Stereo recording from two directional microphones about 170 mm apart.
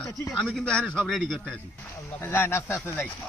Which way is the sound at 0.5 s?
5° left (ahead or behind).